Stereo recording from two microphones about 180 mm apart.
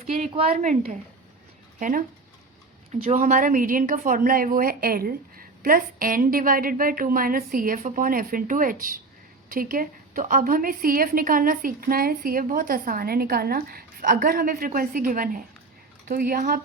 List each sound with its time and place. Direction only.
0.1 s speech: 30° right (ahead or behind)
0.5 s a woman's voice: 45° right (ahead or behind)
1.8 s a woman's voice: 50° right (ahead or behind)